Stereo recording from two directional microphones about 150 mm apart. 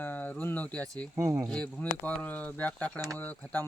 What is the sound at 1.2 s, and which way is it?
Speech, 20° right (ahead or behind).